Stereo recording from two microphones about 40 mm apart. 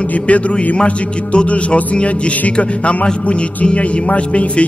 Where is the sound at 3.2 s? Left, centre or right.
Left.